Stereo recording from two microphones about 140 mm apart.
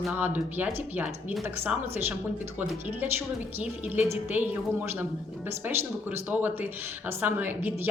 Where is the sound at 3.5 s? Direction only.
15° right (ahead or behind).